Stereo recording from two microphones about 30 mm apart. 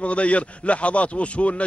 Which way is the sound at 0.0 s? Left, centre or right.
Left.